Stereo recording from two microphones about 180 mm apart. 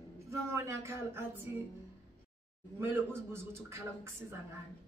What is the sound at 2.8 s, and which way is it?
A woman's voice, 15° right (ahead or behind).